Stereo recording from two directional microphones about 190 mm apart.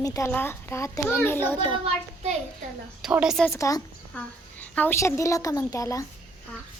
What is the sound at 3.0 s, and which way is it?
Speech, 5° right (ahead or behind).